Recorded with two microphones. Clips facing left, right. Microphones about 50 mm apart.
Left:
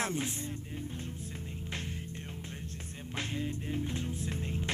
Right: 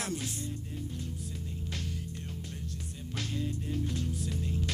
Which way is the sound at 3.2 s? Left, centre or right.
Left.